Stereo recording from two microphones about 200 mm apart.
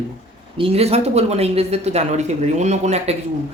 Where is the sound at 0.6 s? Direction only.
30° right (ahead or behind).